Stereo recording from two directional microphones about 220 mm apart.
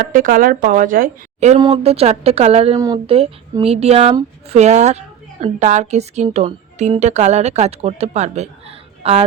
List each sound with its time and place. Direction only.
0.0 s speech: 40° right (ahead or behind)
1.5 s speech: 25° right (ahead or behind)